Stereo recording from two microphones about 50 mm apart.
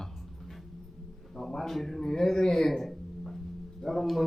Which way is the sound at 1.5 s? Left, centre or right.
Centre.